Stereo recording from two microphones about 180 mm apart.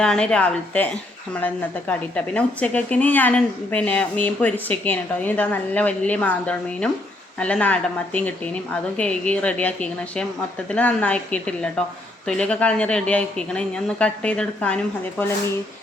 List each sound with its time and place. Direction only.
0.0 s speech: 5° left (ahead or behind)
1.9 s a woman's voice: 5° left (ahead or behind)